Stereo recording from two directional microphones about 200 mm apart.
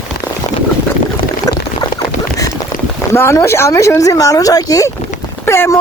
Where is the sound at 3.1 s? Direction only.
10° left (ahead or behind).